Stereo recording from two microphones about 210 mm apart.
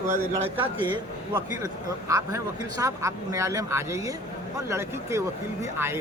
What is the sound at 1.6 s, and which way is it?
Speech, 15° right (ahead or behind).